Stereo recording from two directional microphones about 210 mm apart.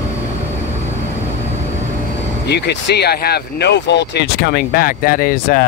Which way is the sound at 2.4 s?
55° left (ahead or behind).